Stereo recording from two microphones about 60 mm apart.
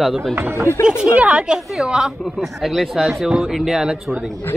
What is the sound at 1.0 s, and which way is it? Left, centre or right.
Speech, centre.